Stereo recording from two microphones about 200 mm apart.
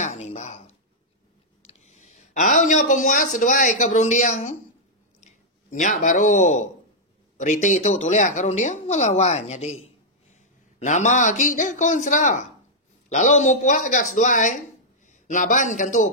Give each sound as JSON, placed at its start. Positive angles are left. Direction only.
{"t": 0.0, "sound": "chink", "side_deg": 35}
{"t": 1.7, "sound": "speech", "side_deg": 35}